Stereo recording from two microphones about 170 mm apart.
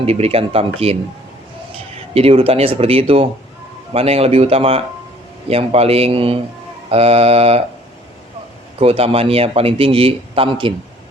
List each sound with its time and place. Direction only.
0.0 s a man's voice: 35° right (ahead or behind)
2.1 s a man's voice: 35° right (ahead or behind)
8.8 s a man's voice: 35° right (ahead or behind)